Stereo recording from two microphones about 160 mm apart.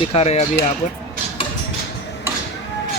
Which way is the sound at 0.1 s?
40° left (ahead or behind).